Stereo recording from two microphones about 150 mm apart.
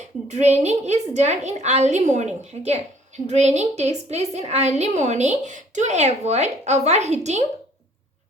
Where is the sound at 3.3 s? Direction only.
50° right (ahead or behind).